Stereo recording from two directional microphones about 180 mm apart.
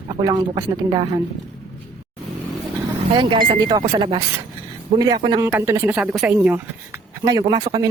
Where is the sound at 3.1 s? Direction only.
25° right (ahead or behind).